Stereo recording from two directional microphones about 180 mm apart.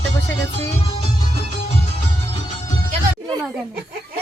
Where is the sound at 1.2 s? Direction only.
30° left (ahead or behind).